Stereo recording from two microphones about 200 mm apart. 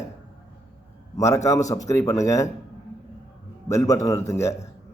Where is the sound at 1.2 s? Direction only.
15° left (ahead or behind).